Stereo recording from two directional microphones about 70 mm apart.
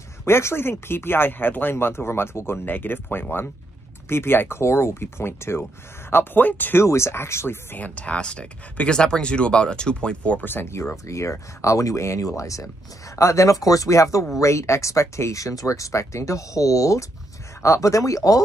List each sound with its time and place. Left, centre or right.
0.2 s speech: left
6.8 s speech: left
7.7 s speech: centre
10.4 s speech: left